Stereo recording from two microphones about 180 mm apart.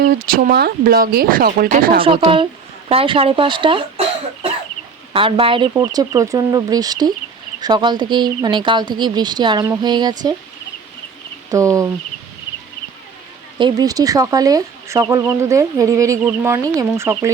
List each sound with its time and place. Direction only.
0.0 s speech: 50° right (ahead or behind)
2.0 s speech: 30° right (ahead or behind)
5.1 s speech: 30° right (ahead or behind)
11.5 s speech: 15° right (ahead or behind)
13.6 s speech: 25° right (ahead or behind)